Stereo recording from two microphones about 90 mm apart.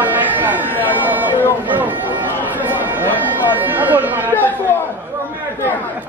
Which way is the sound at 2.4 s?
20° right (ahead or behind).